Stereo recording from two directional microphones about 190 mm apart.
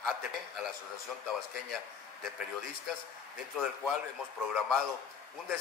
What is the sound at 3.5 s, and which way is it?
Speech, centre (ahead or behind).